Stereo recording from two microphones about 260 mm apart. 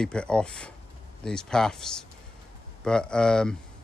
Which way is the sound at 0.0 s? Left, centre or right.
Centre.